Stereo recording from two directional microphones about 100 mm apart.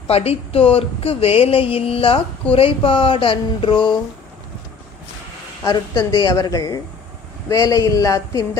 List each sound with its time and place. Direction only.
0.1 s speech: 90° left; by 3.9 s 50° left (ahead or behind)
5.6 s a woman's voice: 45° left (ahead or behind)